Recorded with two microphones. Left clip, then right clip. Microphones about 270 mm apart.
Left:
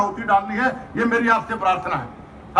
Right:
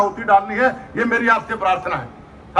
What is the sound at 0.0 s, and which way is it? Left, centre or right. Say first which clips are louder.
A man's voice: right 4 dB; centre.